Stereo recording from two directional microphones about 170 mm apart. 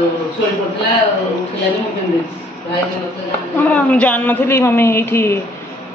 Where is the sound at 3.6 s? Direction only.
10° left (ahead or behind).